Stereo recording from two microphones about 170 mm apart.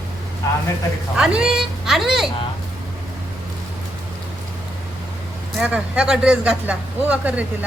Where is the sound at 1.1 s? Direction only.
5° right (ahead or behind).